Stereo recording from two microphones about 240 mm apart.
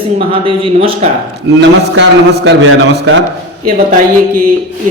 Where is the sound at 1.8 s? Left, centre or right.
Right.